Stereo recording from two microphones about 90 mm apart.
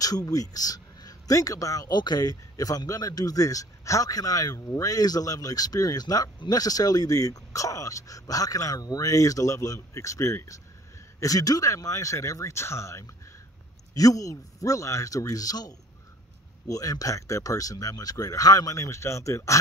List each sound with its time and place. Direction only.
0.0 s a man's voice: 45° left (ahead or behind)